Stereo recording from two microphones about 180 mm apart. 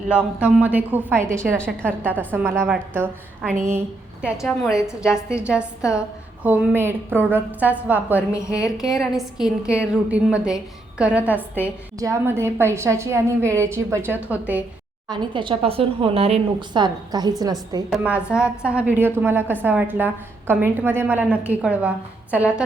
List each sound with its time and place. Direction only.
0.3 s a woman's voice: 10° right (ahead or behind)
4.4 s a woman's voice: centre (ahead or behind)
15.0 s a woman's voice: 25° right (ahead or behind)
17.9 s a woman's voice: 5° right (ahead or behind)